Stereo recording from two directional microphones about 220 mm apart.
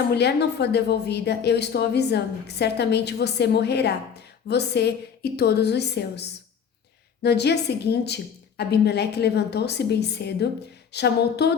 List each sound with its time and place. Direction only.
0.1 s a woman's voice: 50° left (ahead or behind)